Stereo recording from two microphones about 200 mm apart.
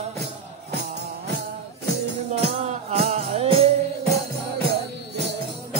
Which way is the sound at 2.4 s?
30° right (ahead or behind).